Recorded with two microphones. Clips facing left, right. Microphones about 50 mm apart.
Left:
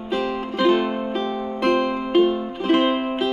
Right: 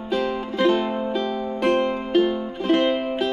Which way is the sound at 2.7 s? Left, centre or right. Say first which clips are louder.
Left 1 dB; centre.